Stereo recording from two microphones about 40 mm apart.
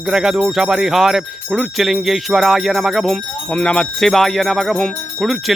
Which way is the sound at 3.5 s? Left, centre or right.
Left.